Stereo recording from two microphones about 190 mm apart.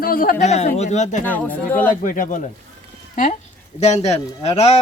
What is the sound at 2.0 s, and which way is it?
Speech, 45° left (ahead or behind).